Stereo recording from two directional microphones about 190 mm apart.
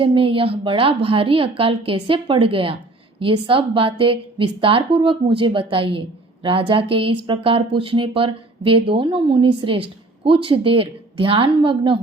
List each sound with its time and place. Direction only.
0.0 s a woman's voice: 30° right (ahead or behind)